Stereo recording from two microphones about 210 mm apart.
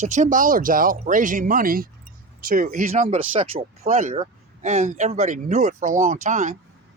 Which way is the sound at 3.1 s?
25° right (ahead or behind).